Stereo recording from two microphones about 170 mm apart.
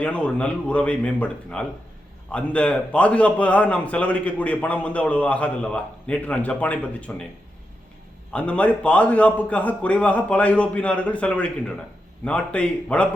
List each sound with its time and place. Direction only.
0.0 s a man's voice: 5° left (ahead or behind)
8.3 s a man's voice: 5° left (ahead or behind)